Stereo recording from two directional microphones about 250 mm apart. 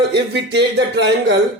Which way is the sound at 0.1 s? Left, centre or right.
Right.